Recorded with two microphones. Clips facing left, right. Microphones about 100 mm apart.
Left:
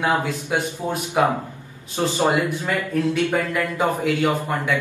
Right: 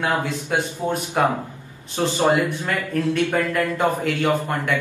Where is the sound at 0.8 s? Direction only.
10° left (ahead or behind).